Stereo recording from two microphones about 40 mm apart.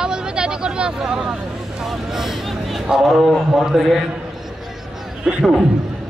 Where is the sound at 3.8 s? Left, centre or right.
Centre.